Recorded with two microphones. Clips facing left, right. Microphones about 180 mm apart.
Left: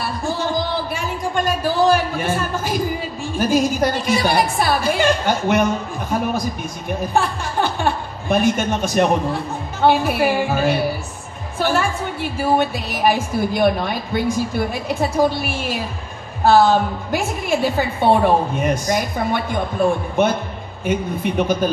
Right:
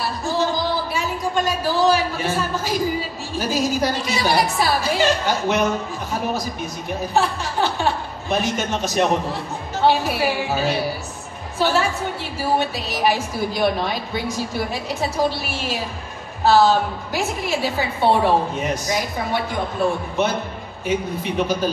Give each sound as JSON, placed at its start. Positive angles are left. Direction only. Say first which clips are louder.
{"t": 0.3, "sound": "a woman's voice", "louder": "right 1 dB", "side_deg": 50}
{"t": 7.2, "sound": "a woman's voice", "louder": "even", "side_deg": 55}